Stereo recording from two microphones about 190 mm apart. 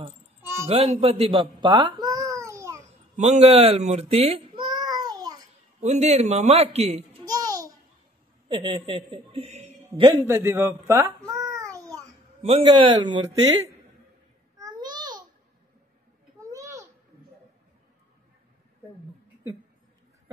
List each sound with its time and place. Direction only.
0.7 s speech: 35° right (ahead or behind); by 2.8 s 15° right (ahead or behind)
3.2 s a child's voice: 35° right (ahead or behind)
5.8 s a child's voice: 35° right (ahead or behind)
10.2 s babbling: 15° right (ahead or behind)
12.4 s speech: 30° right (ahead or behind)
14.6 s babbling: 20° right (ahead or behind)
16.3 s a sound: 15° right (ahead or behind)